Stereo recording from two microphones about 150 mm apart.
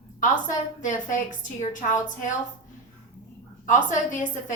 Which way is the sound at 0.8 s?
60° left (ahead or behind).